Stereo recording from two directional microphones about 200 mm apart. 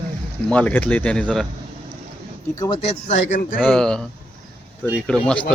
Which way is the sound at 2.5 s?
15° left (ahead or behind).